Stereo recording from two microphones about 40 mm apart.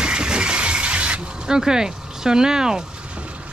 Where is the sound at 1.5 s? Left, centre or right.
Centre.